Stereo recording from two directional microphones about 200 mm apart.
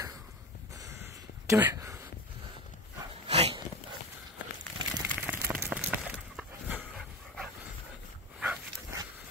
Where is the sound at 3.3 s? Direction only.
30° right (ahead or behind).